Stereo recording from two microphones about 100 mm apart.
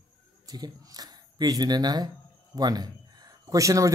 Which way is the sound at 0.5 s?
40° right (ahead or behind).